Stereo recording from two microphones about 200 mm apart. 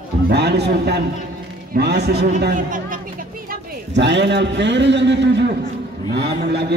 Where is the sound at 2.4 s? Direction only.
45° right (ahead or behind).